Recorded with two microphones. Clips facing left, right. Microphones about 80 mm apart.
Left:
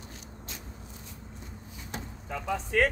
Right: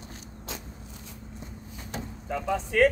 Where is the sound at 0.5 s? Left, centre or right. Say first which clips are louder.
Right 7 dB; right.